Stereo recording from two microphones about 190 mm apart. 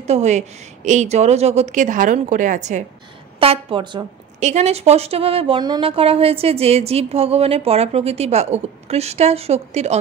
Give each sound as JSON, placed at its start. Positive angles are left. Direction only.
{"t": 0.0, "sound": "a woman's voice", "side_deg": -35}
{"t": 3.3, "sound": "a woman's voice", "side_deg": -25}